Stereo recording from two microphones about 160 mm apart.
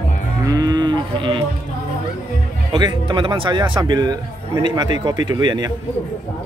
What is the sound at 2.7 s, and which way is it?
A man's voice, 25° right (ahead or behind).